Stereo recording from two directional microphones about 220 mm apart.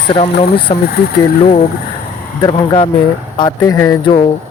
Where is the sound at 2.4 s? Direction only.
20° left (ahead or behind).